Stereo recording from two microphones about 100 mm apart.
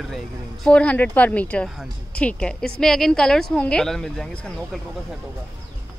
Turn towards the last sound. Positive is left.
turn(degrees=5)  # may be behind; listen again after turning